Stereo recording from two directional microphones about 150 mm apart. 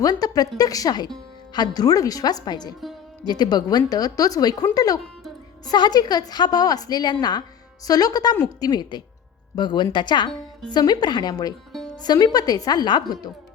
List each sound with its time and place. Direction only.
0.0 s a woman's voice: 25° left (ahead or behind)